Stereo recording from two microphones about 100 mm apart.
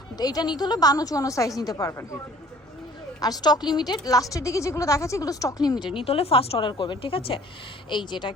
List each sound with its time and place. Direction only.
0.2 s a woman's voice: 40° left (ahead or behind)
3.2 s a woman's voice: 40° left (ahead or behind)
5.9 s a woman's voice: 65° left (ahead or behind)
6.7 s speech: 50° left (ahead or behind)
7.9 s speech: 50° left (ahead or behind)